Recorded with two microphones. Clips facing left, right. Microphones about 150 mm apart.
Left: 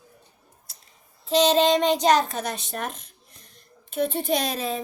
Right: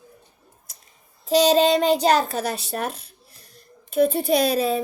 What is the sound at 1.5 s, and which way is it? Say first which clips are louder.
Child singing: right 2 dB; 35° right (ahead or behind).